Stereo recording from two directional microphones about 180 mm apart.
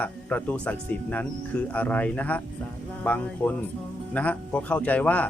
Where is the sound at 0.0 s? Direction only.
10° left (ahead or behind).